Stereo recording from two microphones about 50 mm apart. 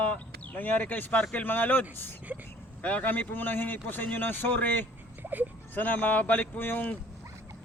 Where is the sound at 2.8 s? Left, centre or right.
Left.